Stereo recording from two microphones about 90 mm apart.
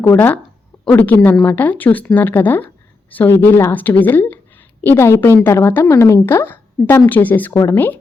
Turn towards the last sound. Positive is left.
turn(degrees=20)  # may be behind; listen again after turning